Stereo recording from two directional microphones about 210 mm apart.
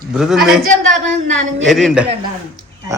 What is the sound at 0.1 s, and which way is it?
Speech, 5° right (ahead or behind).